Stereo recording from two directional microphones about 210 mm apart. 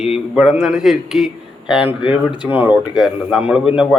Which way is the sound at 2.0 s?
20° left (ahead or behind).